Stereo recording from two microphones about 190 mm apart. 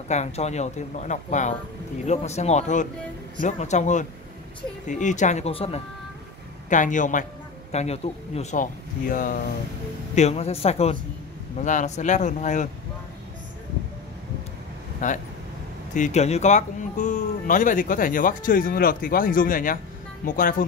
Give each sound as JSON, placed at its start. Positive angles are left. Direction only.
{"t": 0.1, "sound": "speech", "side_deg": 35}
{"t": 6.7, "sound": "speech", "side_deg": 40}
{"t": 10.1, "sound": "speech", "side_deg": 35}
{"t": 15.0, "sound": "speech", "side_deg": 40}